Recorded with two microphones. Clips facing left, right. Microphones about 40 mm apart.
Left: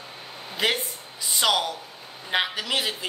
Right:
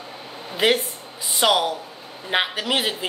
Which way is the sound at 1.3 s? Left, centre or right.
Centre.